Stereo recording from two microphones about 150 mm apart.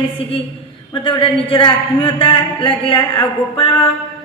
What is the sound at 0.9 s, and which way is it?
Mantra, 35° left (ahead or behind).